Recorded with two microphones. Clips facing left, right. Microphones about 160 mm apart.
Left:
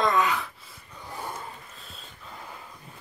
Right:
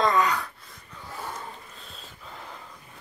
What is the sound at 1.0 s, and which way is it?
Dog, 15° left (ahead or behind).